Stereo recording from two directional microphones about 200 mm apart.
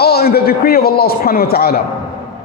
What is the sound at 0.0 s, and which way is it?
A man's voice, 50° left (ahead or behind).